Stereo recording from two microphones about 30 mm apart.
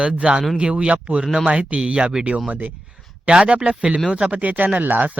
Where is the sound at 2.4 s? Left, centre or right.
Right.